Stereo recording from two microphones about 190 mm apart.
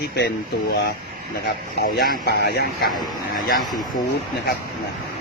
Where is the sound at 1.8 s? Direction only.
50° left (ahead or behind).